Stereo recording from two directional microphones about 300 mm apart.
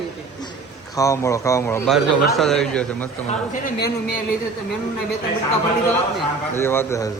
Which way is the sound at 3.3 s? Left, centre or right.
Left.